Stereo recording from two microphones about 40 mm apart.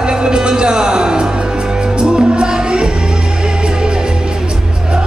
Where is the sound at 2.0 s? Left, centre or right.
Right.